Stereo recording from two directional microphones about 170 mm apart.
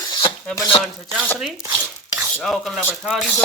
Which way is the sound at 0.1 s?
25° left (ahead or behind).